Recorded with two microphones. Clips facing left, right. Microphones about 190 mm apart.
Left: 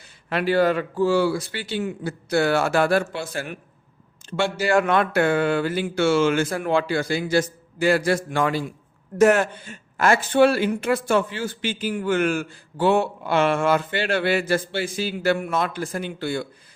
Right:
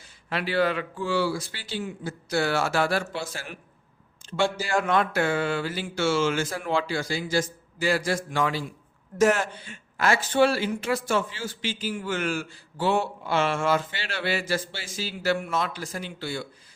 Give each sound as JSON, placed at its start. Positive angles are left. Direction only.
{"t": 0.3, "sound": "speech", "side_deg": 50}
{"t": 1.3, "sound": "a woman's voice", "side_deg": 65}